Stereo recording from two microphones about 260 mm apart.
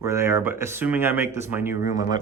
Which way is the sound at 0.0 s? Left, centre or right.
Centre.